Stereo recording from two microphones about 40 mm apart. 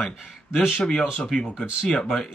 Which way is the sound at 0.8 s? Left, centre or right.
Centre.